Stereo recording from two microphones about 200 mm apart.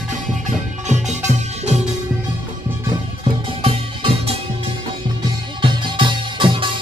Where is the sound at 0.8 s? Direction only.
35° right (ahead or behind).